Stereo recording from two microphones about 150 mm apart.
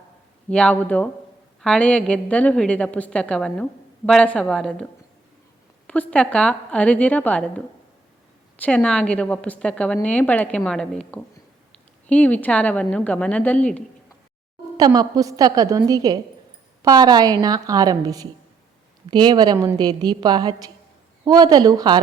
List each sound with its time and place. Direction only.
0.5 s a woman's voice: 10° left (ahead or behind)
5.9 s a woman's voice: 10° left (ahead or behind)
8.6 s a woman's voice: 5° left (ahead or behind)
14.8 s a woman's voice: 25° right (ahead or behind)